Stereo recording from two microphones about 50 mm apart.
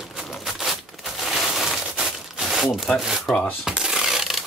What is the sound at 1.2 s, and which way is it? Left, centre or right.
Crushing, centre.